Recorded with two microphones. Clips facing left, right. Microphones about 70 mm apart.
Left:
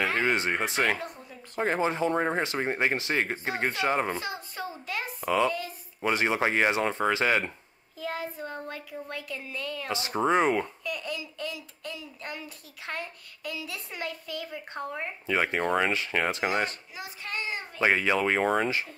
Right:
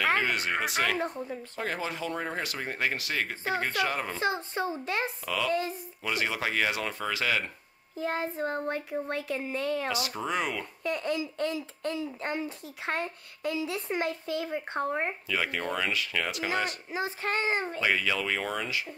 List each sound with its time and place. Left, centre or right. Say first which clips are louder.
0.2 s speech: left 2 dB; left
0.9 s speech: right 7 dB; right
1.6 s speech: left 8 dB; left
4.2 s speech: right 6 dB; right
5.2 s speech: left 6 dB; left
5.5 s speech: right 5 dB; right
6.0 s speech: left 5 dB; left
8.0 s speech: right 4 dB; right
9.8 s speech: left 5 dB; left
10.8 s speech: right 5 dB; right
15.2 s speech: left 4 dB; left
16.9 s speech: right 7 dB; right
17.7 s speech: left 4 dB; left